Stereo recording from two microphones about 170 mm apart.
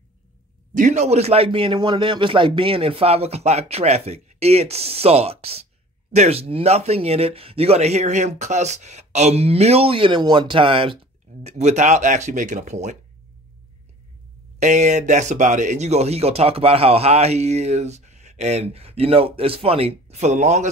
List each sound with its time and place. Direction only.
0.7 s speech: 45° right (ahead or behind)
14.6 s speech: 45° right (ahead or behind)